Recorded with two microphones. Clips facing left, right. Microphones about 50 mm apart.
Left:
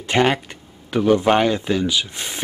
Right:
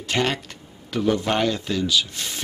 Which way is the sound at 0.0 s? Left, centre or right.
Left.